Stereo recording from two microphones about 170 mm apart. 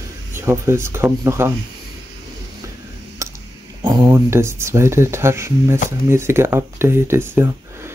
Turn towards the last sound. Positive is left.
turn(degrees=-15)  # may be behind; listen again after turning